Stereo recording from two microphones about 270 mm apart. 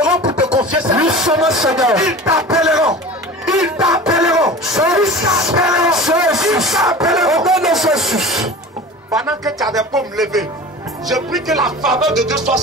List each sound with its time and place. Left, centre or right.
0.2 s a sound: centre
1.0 s speech: centre
3.4 s music: centre
5.2 s music: centre
5.6 s a sound: centre
9.1 s speech: centre
9.9 s speech: centre